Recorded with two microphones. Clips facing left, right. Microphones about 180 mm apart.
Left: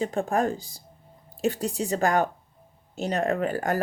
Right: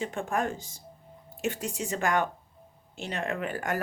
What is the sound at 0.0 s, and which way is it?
Speech, 35° left (ahead or behind).